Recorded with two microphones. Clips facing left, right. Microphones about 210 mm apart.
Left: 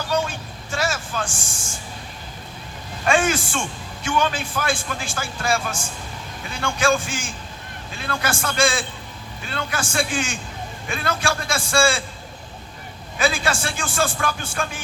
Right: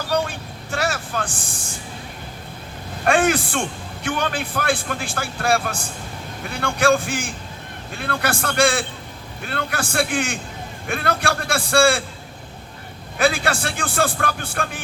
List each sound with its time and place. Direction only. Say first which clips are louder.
0.3 s vehicle: right 1 dB; 60° right (ahead or behind)
1.3 s speech: right 1 dB; 35° right (ahead or behind)
3.0 s a man's voice: right 2 dB; 60° right (ahead or behind)
13.1 s a man's voice: right 2 dB; 60° right (ahead or behind)